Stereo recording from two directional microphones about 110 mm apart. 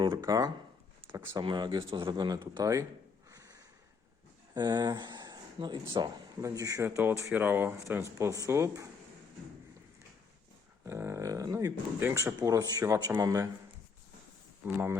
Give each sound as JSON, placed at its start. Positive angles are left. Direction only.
{"t": 0.0, "sound": "speech", "side_deg": -45}
{"t": 1.0, "sound": "speech", "side_deg": -25}
{"t": 1.4, "sound": "speech", "side_deg": -40}
{"t": 3.3, "sound": "a sound", "side_deg": -35}
{"t": 4.5, "sound": "speech", "side_deg": -40}
{"t": 10.8, "sound": "speech", "side_deg": -25}
{"t": 12.4, "sound": "speech", "side_deg": -35}